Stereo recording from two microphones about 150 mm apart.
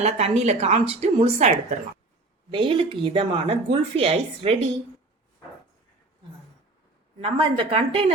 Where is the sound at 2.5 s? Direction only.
35° right (ahead or behind).